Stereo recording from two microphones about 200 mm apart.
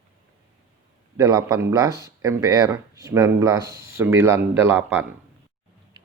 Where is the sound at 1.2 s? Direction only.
20° right (ahead or behind).